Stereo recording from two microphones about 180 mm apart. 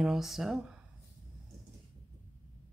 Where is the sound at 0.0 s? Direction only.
Centre (ahead or behind).